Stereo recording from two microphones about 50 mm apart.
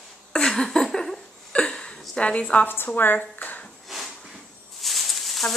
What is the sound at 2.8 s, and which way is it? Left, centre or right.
Speech, left.